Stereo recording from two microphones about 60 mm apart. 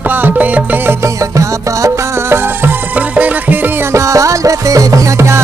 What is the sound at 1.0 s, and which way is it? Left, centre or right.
Music, right.